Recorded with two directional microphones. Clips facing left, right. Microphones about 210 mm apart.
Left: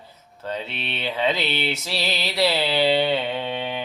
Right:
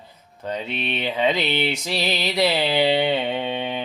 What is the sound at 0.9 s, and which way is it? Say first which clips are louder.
Mantra: right 2 dB; 15° right (ahead or behind).